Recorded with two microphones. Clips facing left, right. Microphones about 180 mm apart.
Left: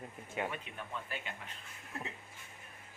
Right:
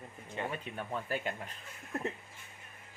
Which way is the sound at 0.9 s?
40° right (ahead or behind).